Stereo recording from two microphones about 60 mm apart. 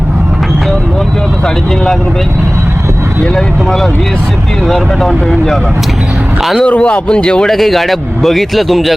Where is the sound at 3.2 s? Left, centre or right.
Centre.